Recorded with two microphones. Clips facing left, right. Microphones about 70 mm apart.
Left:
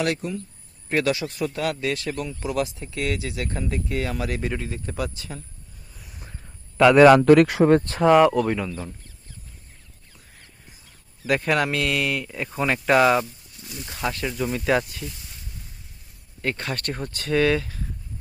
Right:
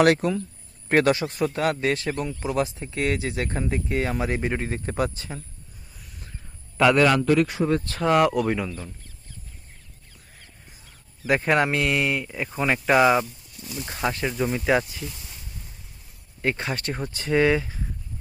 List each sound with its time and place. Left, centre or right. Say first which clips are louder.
0.0 s speech: right 7 dB; right
0.9 s speech: right 3 dB; right
4.6 s speech: right 3 dB; right
7.0 s speech: left 8 dB; left
7.3 s speech: left 6 dB; left
8.0 s speech: left 3 dB; centre
11.3 s speech: right 1 dB; right
12.3 s speech: even; centre
13.7 s speech: right 3 dB; right
14.0 s speech: right 1 dB; centre
16.4 s speech: right 1 dB; centre